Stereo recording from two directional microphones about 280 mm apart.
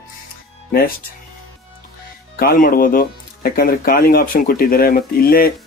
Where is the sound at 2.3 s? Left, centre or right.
Left.